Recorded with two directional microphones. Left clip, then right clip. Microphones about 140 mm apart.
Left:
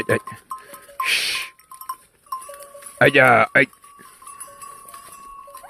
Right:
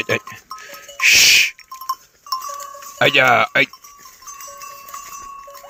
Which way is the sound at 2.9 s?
70° left (ahead or behind).